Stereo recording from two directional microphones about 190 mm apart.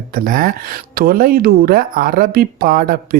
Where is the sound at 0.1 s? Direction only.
50° right (ahead or behind).